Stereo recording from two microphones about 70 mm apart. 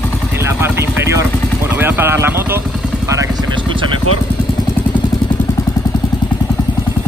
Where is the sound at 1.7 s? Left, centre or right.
Right.